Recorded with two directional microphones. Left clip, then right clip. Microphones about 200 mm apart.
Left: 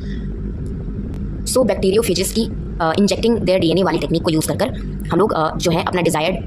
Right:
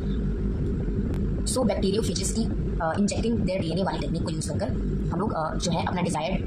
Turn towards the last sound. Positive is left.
turn(degrees=50)  # may be behind; listen again after turning